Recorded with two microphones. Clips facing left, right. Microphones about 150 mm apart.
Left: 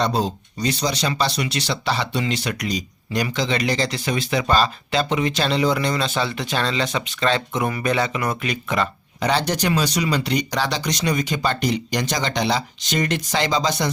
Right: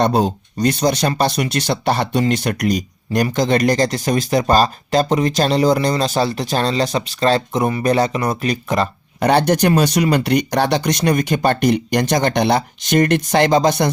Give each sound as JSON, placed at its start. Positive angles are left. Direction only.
{"t": 0.0, "sound": "speech", "side_deg": -55}
{"t": 9.2, "sound": "speech", "side_deg": -55}